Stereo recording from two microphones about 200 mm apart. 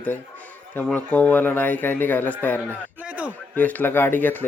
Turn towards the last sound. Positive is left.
turn(degrees=10)  # may be behind; listen again after turning